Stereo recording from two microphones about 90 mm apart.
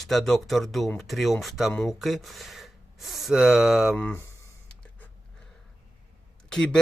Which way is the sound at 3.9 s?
20° left (ahead or behind).